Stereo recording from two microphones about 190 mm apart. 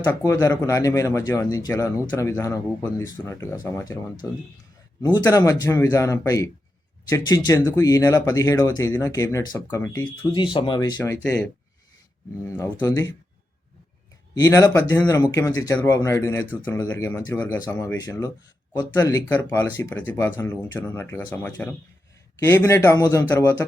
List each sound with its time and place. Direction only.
0.1 s speech: 15° left (ahead or behind)
12.5 s speech: 15° left (ahead or behind)
14.3 s speech: 15° left (ahead or behind)